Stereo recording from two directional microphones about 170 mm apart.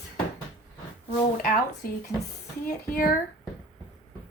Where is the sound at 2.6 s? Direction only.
55° left (ahead or behind).